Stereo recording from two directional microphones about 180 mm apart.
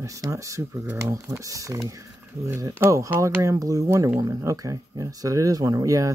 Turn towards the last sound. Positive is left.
turn(degrees=-20)  # may be behind; listen again after turning